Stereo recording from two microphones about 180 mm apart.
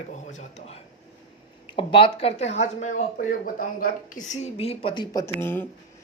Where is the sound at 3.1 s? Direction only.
50° left (ahead or behind); by 5.6 s 10° left (ahead or behind).